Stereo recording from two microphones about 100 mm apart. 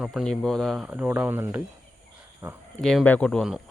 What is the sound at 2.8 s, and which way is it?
Speech, 5° left (ahead or behind).